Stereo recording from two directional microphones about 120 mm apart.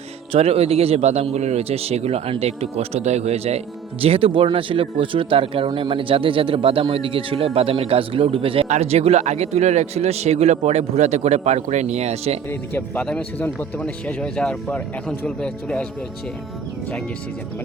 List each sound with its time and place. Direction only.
0.3 s speech: 55° right (ahead or behind)
8.7 s a man's voice: 65° right (ahead or behind)
12.5 s speech: 15° left (ahead or behind)